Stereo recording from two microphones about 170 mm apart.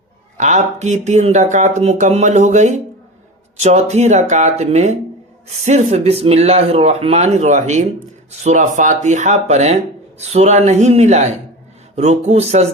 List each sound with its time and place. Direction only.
0.3 s speech: 45° right (ahead or behind)